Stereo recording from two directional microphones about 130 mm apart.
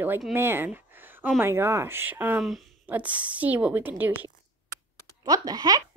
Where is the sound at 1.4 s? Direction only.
20° right (ahead or behind).